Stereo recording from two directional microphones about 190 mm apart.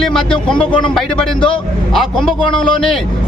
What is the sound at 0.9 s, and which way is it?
A man's voice, centre (ahead or behind).